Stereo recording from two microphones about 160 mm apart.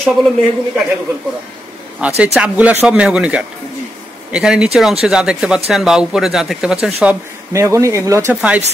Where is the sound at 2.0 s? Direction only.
5° right (ahead or behind).